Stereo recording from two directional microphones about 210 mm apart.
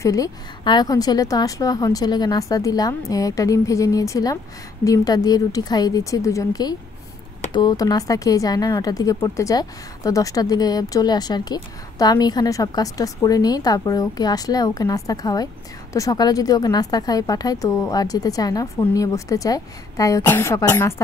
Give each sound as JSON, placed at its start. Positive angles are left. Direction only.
{"t": 0.0, "sound": "speech", "side_deg": 15}